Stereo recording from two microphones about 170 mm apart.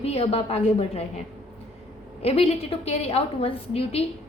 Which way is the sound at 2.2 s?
35° left (ahead or behind).